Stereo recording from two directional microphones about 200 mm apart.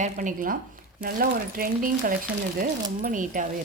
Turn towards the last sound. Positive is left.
turn(degrees=-40)  # may be behind; listen again after turning